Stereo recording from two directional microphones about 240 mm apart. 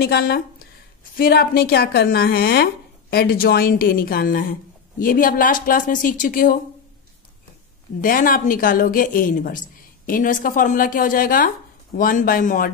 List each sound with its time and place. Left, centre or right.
0.0 s a woman's voice: left
8.0 s a woman's voice: left